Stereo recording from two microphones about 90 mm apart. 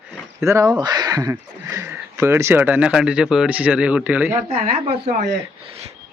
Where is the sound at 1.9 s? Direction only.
25° right (ahead or behind).